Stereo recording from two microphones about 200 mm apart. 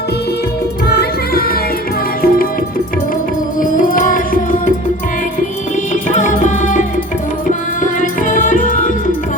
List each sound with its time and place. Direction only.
0.9 s music: 50° left (ahead or behind)
3.6 s music: 45° left (ahead or behind)
5.9 s music: 40° left (ahead or behind)
8.0 s music: 40° left (ahead or behind)